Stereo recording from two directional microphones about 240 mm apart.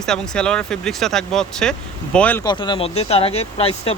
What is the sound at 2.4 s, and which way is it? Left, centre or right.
Speech, centre.